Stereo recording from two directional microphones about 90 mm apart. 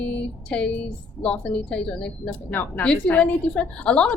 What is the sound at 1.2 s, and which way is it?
A woman's voice, 10° left (ahead or behind).